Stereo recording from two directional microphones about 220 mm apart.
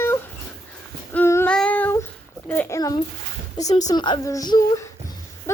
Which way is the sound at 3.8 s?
20° left (ahead or behind).